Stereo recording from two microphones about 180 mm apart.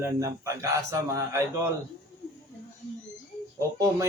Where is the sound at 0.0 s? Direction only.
15° right (ahead or behind).